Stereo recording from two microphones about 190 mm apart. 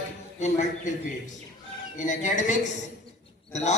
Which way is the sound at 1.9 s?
40° left (ahead or behind).